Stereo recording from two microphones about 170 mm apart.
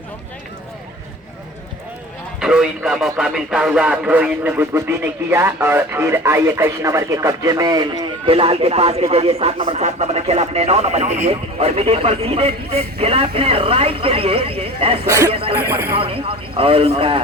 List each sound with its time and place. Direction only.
2.4 s speech: 5° right (ahead or behind); by 7.9 s 25° right (ahead or behind)
8.3 s speech: 35° right (ahead or behind)
15.0 s speech: 20° right (ahead or behind)
15.3 s speech: 35° right (ahead or behind)
15.5 s speech: 15° right (ahead or behind)
16.0 s speech: 35° right (ahead or behind)